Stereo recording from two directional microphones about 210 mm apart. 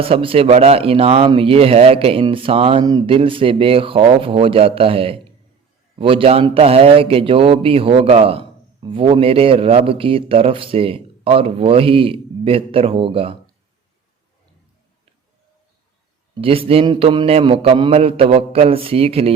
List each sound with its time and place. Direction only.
0.0 s a man's voice: 25° right (ahead or behind)
16.4 s a man's voice: 25° right (ahead or behind)